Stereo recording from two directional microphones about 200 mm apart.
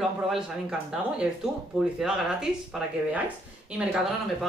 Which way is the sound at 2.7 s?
5° right (ahead or behind).